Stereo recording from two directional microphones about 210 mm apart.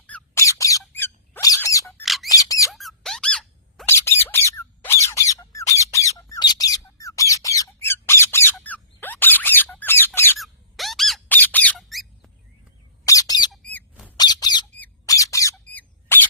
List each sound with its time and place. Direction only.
0.1 s a sound: 15° left (ahead or behind)
2.0 s bird: centre (ahead or behind)
2.3 s a sound: 15° left (ahead or behind)
2.7 s squeak: centre (ahead or behind)
5.0 s squawk: 15° left (ahead or behind)
10.3 s squeak: centre (ahead or behind)
13.1 s squawk: 15° left (ahead or behind)
13.5 s a sound: 5° left (ahead or behind)
14.2 s squeak: 20° left (ahead or behind)